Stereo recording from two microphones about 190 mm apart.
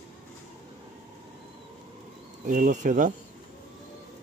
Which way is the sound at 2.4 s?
40° right (ahead or behind).